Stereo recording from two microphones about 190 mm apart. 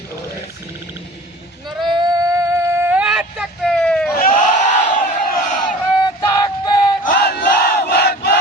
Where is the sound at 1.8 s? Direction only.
25° right (ahead or behind); by 4.1 s 5° left (ahead or behind).